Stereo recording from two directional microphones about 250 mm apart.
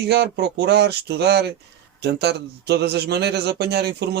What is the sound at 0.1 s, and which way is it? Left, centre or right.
A man's voice, right.